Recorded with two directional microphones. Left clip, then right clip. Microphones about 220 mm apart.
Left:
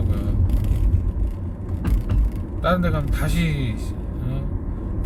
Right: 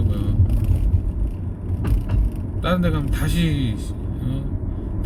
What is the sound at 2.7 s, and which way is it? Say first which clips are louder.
Speech: left 1 dB; 5° right (ahead or behind).